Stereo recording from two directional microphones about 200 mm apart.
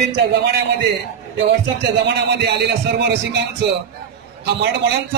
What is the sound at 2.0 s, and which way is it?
Speech, 55° right (ahead or behind).